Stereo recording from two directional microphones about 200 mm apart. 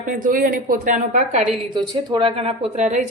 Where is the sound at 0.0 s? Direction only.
45° right (ahead or behind).